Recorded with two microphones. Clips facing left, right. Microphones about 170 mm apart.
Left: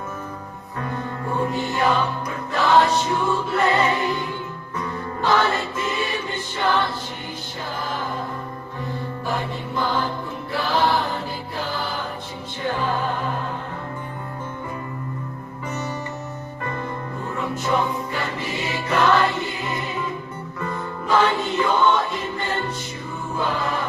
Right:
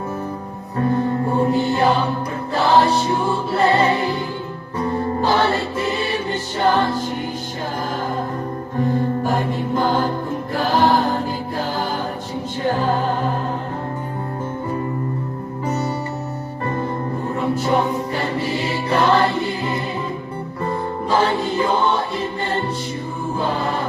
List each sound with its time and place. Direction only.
0.8 s music: 35° right (ahead or behind)
8.8 s music: 45° right (ahead or behind)
15.6 s music: 35° right (ahead or behind)
17.2 s music: 35° right (ahead or behind)
21.6 s choir: 30° right (ahead or behind)